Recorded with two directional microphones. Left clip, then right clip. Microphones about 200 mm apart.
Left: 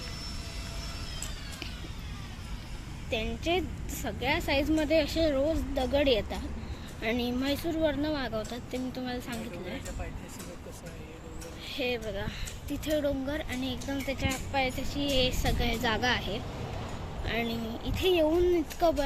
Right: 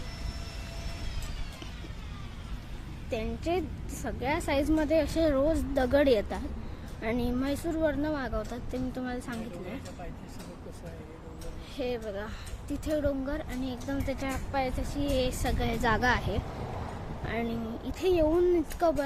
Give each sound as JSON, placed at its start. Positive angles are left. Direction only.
{"t": 3.1, "sound": "speech", "side_deg": -10}
{"t": 5.5, "sound": "a woman's voice", "side_deg": -25}
{"t": 7.0, "sound": "speech", "side_deg": -5}
{"t": 11.7, "sound": "a woman's voice", "side_deg": -5}